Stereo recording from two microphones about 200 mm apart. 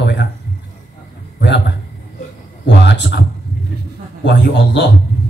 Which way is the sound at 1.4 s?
60° left (ahead or behind).